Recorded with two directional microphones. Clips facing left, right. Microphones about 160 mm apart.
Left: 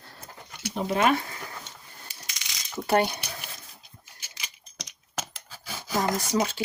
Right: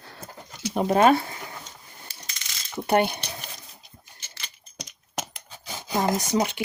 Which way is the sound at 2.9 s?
20° right (ahead or behind).